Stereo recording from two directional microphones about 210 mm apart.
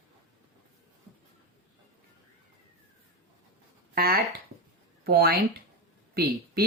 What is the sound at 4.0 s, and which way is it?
Speech, 45° right (ahead or behind).